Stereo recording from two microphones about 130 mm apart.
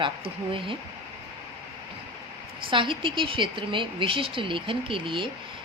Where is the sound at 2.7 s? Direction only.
40° right (ahead or behind).